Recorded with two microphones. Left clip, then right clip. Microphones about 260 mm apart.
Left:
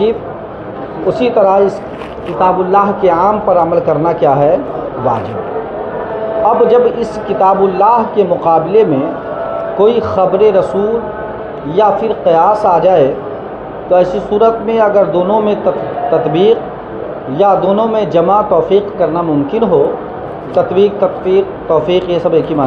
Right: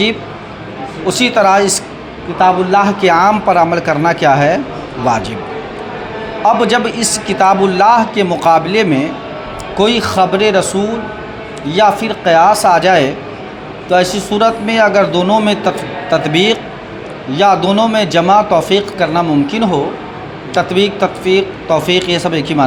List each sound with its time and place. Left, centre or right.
1.0 s speech: right
6.7 s speech: right